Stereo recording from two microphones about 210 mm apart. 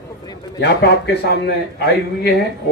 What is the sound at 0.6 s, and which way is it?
Speech, 50° left (ahead or behind).